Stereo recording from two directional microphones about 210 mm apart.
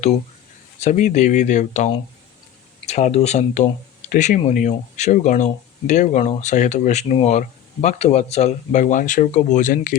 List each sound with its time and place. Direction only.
0.8 s speech: 35° left (ahead or behind)